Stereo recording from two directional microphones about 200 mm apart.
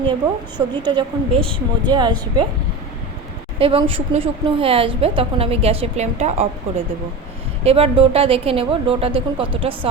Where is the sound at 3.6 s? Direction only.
25° right (ahead or behind).